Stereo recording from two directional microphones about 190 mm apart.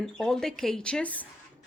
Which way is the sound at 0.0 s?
5° left (ahead or behind).